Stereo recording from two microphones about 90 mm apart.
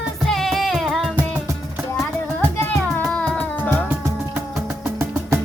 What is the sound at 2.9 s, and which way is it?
Music, 15° left (ahead or behind).